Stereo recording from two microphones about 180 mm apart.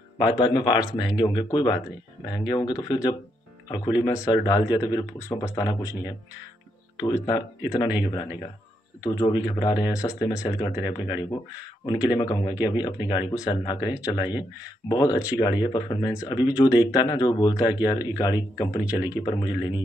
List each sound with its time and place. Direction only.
0.2 s speech: 25° left (ahead or behind)
7.0 s speech: 25° left (ahead or behind)